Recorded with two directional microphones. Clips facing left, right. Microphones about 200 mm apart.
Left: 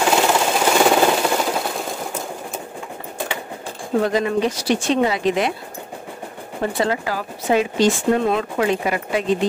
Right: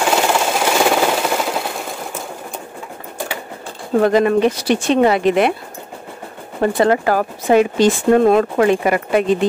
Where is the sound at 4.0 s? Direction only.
60° right (ahead or behind).